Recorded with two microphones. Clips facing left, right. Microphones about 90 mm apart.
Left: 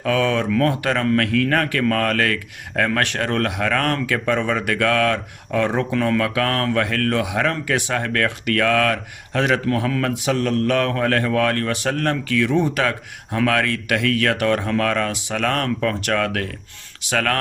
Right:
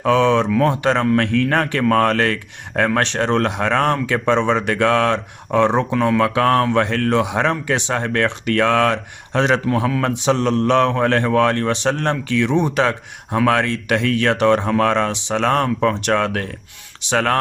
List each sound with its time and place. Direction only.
0.0 s speech: 20° right (ahead or behind)
9.6 s speech: 15° right (ahead or behind)
10.0 s speech: 25° right (ahead or behind)